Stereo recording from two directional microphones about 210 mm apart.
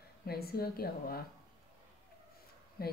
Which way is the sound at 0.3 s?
45° left (ahead or behind).